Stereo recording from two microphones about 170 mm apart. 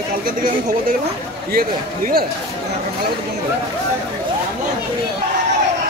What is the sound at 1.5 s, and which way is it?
Speech, 60° right (ahead or behind).